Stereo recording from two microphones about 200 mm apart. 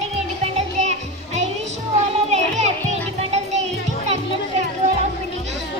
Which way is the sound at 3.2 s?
35° right (ahead or behind).